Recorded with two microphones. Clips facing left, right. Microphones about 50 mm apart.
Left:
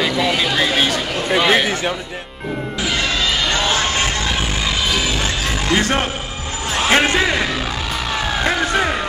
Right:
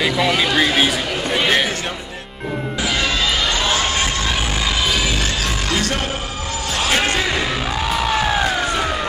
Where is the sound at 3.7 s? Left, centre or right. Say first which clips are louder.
Left 1 dB; left.